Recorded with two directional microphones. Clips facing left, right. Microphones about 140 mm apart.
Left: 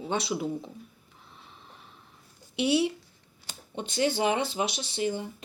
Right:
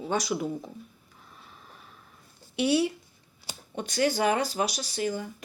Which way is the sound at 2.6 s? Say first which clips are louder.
Right 1 dB; 20° left (ahead or behind).